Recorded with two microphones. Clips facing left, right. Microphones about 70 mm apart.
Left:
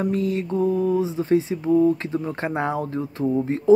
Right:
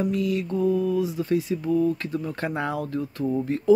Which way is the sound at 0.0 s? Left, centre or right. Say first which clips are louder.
Left 2 dB; left.